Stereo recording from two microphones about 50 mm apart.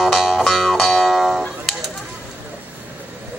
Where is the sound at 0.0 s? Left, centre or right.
Centre.